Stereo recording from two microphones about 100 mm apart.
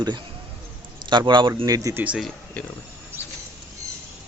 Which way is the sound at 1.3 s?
50° right (ahead or behind).